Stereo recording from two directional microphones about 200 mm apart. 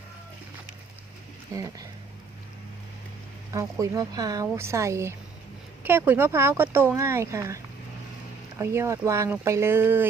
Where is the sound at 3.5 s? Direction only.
15° right (ahead or behind).